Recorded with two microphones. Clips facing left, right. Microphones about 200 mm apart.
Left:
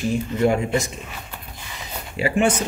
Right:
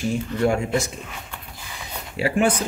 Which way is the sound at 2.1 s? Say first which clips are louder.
Left 1 dB; centre (ahead or behind).